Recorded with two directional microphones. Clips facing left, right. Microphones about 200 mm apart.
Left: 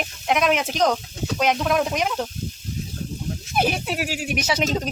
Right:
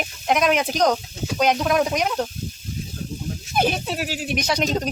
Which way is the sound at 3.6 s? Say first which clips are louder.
Right 1 dB; 5° left (ahead or behind).